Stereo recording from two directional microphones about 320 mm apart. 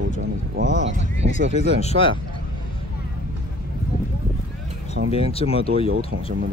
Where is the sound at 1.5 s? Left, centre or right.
Left.